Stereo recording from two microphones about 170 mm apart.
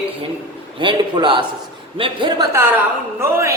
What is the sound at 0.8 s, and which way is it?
A man's voice, 30° right (ahead or behind).